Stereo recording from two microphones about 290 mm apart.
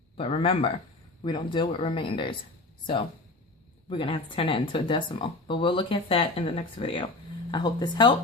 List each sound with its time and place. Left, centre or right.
0.2 s speech: centre
3.8 s speech: centre